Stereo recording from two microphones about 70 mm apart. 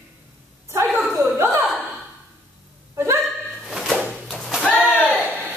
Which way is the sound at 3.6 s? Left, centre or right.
Centre.